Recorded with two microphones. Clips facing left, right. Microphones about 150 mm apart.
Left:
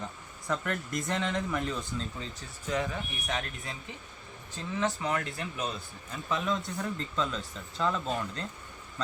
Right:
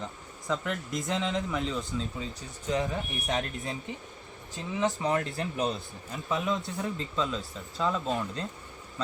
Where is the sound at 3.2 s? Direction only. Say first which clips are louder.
Right 4 dB; 40° right (ahead or behind).